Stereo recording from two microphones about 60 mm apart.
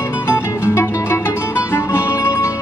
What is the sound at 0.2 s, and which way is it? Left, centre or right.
Music, left.